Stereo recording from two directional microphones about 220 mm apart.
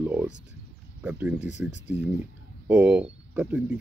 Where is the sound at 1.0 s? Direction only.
10° right (ahead or behind).